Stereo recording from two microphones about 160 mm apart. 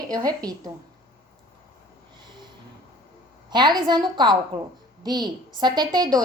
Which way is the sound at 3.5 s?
25° right (ahead or behind).